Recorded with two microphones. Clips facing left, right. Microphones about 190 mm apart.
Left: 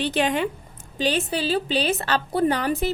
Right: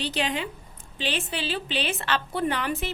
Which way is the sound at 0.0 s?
50° left (ahead or behind).